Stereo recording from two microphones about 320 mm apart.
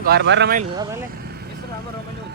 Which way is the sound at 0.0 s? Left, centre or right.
Right.